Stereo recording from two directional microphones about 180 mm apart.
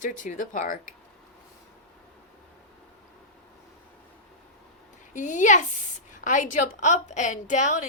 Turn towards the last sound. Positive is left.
turn(degrees=45)  # may be behind; listen again after turning